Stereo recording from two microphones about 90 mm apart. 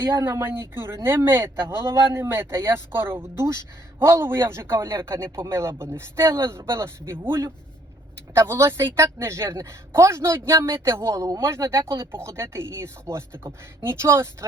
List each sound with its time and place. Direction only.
0.2 s a man's voice: 30° right (ahead or behind)